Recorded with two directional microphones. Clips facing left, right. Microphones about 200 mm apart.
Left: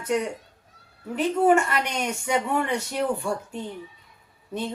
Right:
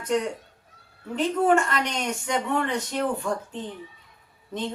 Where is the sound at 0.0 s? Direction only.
10° left (ahead or behind).